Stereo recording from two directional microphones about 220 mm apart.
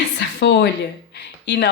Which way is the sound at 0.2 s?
55° left (ahead or behind).